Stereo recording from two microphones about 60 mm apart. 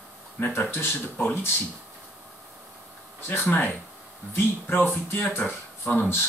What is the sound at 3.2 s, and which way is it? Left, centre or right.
Speech, left.